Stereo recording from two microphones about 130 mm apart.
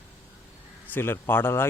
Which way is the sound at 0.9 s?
15° left (ahead or behind).